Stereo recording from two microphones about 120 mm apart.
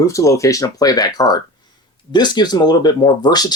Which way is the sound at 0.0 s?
25° left (ahead or behind).